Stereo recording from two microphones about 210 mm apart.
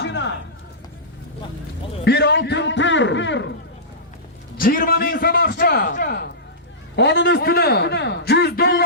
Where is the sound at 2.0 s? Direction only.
55° left (ahead or behind).